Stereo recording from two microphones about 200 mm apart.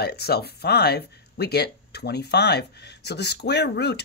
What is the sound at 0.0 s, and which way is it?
Speech, 55° left (ahead or behind).